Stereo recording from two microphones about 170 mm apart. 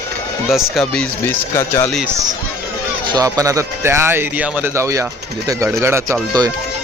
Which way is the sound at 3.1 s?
20° right (ahead or behind).